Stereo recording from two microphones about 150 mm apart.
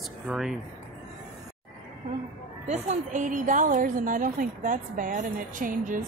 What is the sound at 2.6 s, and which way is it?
A woman's voice, 50° right (ahead or behind).